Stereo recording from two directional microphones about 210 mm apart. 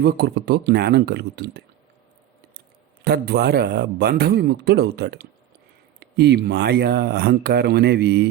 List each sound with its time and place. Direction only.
0.0 s speech: 50° right (ahead or behind)
3.0 s speech: 50° right (ahead or behind)